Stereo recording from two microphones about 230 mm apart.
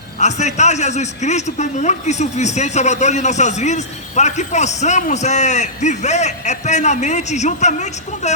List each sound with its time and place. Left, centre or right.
0.2 s a man's voice: left